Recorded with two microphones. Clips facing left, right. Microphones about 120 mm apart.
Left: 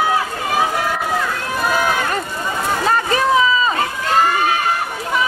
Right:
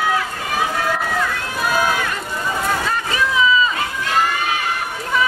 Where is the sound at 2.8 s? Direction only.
40° left (ahead or behind).